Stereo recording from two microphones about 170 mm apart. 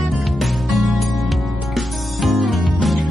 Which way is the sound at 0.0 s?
Centre (ahead or behind).